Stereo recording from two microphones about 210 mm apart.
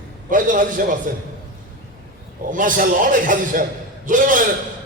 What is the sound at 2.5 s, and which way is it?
A man's voice, 40° right (ahead or behind).